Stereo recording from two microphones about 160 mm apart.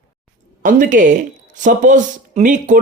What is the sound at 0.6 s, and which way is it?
A man's voice, 55° right (ahead or behind).